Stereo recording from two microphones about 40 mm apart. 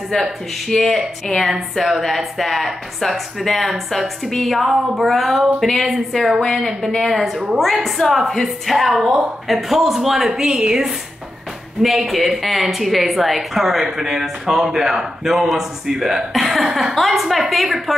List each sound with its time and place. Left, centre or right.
0.7 s speech: centre
1.5 s a woman's voice: centre
10.4 s a woman's voice: centre
11.8 s a woman's voice: centre